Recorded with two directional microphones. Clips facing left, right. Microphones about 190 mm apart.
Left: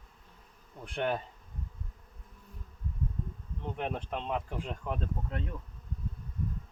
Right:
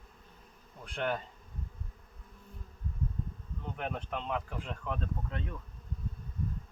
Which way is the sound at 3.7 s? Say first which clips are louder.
Left 2 dB; 25° left (ahead or behind).